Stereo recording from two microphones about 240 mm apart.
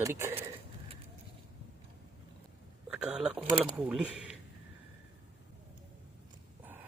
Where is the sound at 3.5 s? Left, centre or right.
Centre.